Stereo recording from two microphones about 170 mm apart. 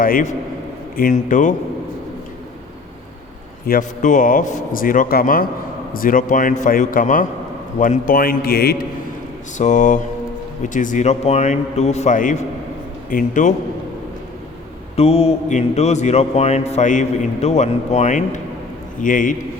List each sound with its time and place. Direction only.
0.0 s a man's voice: 55° left (ahead or behind)
3.7 s a man's voice: 50° left (ahead or behind)
9.6 s speech: 45° left (ahead or behind)
14.9 s a man's voice: 35° left (ahead or behind)